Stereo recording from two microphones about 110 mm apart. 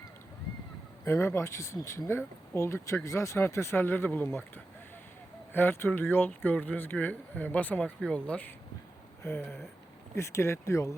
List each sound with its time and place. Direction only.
1.0 s speech: 25° left (ahead or behind)
5.5 s speech: 20° left (ahead or behind)
10.2 s speech: 25° left (ahead or behind)